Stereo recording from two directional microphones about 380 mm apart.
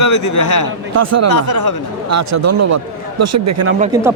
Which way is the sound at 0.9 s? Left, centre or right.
Right.